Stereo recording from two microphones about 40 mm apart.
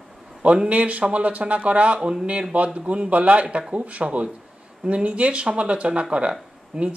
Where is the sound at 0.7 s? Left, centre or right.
Right.